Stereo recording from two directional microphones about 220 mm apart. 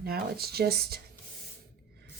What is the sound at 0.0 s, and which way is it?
Speech, 45° right (ahead or behind).